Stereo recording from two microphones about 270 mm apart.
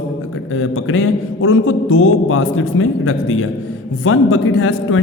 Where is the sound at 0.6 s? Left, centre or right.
Left.